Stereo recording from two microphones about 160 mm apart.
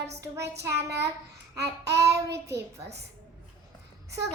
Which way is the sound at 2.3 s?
90° right.